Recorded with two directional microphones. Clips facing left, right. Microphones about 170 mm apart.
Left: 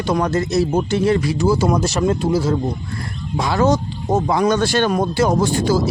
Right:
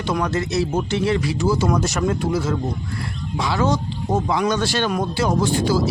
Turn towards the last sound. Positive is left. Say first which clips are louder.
# left 2 dB
turn(degrees=45)  # may be behind; listen again after turning